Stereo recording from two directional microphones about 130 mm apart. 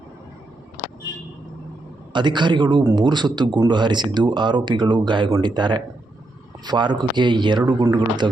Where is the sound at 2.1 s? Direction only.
35° right (ahead or behind).